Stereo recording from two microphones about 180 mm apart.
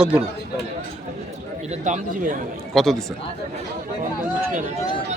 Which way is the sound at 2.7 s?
Centre (ahead or behind).